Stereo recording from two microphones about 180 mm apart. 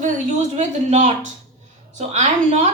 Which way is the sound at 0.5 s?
40° right (ahead or behind).